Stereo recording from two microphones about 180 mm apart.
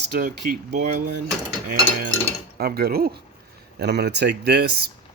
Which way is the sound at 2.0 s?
55° right (ahead or behind).